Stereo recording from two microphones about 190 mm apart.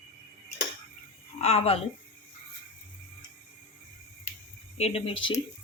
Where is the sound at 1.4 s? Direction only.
35° left (ahead or behind).